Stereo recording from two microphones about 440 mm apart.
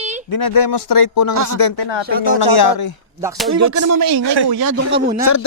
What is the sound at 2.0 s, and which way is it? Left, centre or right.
Speech, right.